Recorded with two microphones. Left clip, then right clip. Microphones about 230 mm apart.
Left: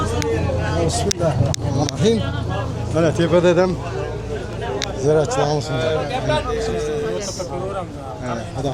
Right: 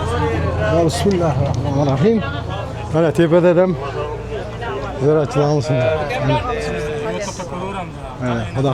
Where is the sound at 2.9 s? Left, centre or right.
Right.